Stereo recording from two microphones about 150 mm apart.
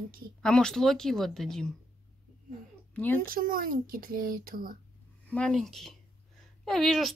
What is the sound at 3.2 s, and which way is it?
Speech, 70° right (ahead or behind).